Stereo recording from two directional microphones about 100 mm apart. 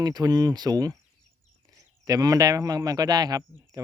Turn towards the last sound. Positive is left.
turn(degrees=-40)  # may be behind; listen again after turning